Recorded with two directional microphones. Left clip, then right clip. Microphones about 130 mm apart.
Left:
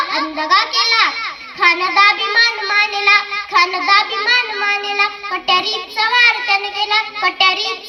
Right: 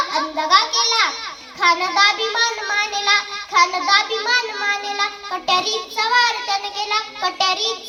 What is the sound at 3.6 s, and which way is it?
A child's voice, 15° left (ahead or behind).